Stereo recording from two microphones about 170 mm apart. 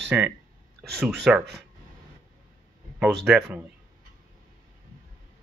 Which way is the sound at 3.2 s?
5° right (ahead or behind).